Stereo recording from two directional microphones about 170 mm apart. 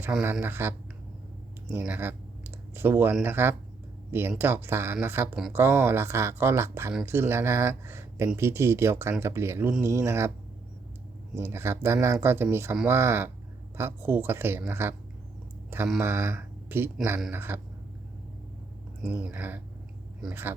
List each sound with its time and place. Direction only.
0.0 s speech: 10° right (ahead or behind)
1.7 s speech: 10° right (ahead or behind)
11.3 s speech: 15° right (ahead or behind)
16.0 s speech: 15° right (ahead or behind)
19.2 s speech: 10° right (ahead or behind)